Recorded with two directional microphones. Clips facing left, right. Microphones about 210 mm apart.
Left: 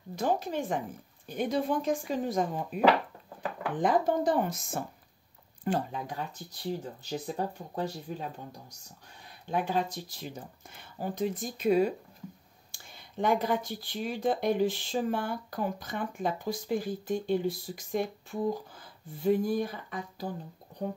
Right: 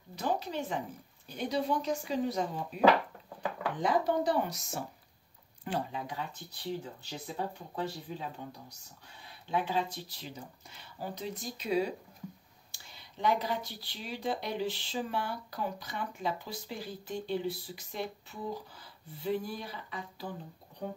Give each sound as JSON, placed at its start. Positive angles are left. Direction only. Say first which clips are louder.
{"t": 0.1, "sound": "speech", "louder": "left 4 dB", "side_deg": 50}
{"t": 3.8, "sound": "speech", "louder": "left 3 dB", "side_deg": 50}
{"t": 9.5, "sound": "speech", "louder": "left 2 dB", "side_deg": 45}